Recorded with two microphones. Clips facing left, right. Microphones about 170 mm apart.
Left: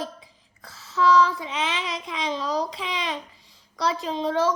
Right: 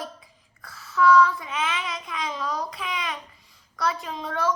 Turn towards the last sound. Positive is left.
turn(degrees=25)  # may be behind; listen again after turning